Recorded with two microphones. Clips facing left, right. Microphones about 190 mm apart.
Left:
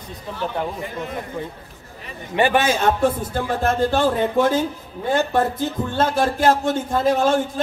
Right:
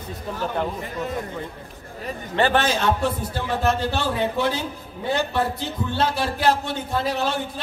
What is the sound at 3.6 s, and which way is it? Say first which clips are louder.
Speech: left 5 dB; 50° left (ahead or behind).